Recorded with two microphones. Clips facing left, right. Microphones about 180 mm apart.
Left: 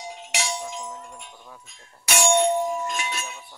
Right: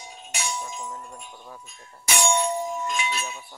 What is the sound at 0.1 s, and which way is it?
Music, 85° left.